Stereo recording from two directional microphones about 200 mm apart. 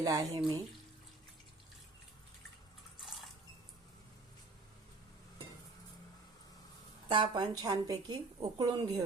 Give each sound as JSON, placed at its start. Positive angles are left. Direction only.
{"t": 0.0, "sound": "speech", "side_deg": -20}
{"t": 7.1, "sound": "speech", "side_deg": -20}